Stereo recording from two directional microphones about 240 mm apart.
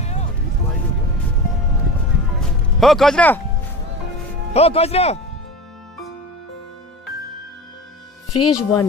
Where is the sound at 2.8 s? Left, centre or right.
Centre.